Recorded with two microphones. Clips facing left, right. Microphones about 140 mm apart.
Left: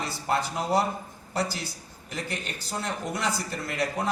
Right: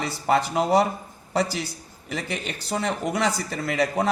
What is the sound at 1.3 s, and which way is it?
A man's voice, 90° right.